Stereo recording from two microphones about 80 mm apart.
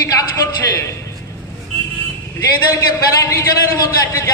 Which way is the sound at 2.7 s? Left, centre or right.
Left.